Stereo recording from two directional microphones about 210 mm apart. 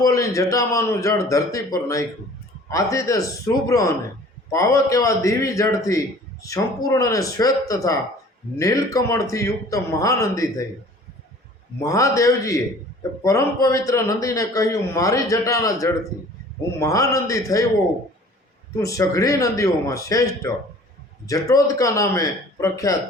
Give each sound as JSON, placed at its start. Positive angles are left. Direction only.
{"t": 0.0, "sound": "a man's voice", "side_deg": 15}
{"t": 11.8, "sound": "a man's voice", "side_deg": 15}
{"t": 18.8, "sound": "a man's voice", "side_deg": 15}